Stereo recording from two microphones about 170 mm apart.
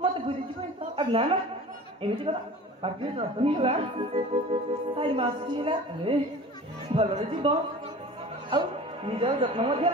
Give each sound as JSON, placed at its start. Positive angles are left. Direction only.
{"t": 0.9, "sound": "a woman's voice", "side_deg": -35}